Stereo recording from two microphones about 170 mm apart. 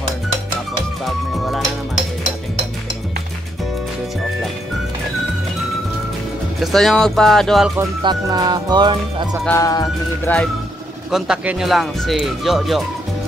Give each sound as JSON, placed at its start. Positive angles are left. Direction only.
{"t": 1.0, "sound": "music", "side_deg": 0}
{"t": 6.6, "sound": "speech", "side_deg": 0}
{"t": 8.0, "sound": "speech", "side_deg": -25}
{"t": 9.5, "sound": "speech", "side_deg": 20}
{"t": 11.1, "sound": "speech", "side_deg": -5}